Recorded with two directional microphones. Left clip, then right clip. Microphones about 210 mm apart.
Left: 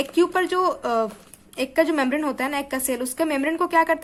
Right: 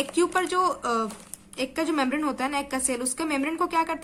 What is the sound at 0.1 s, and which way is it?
A woman's voice, 20° left (ahead or behind).